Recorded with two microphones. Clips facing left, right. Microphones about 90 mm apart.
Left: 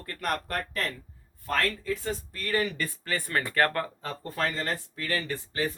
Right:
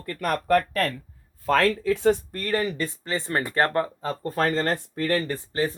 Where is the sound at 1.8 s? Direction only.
75° right (ahead or behind).